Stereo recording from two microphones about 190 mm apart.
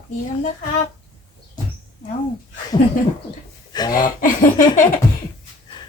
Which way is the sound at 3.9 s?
45° left (ahead or behind).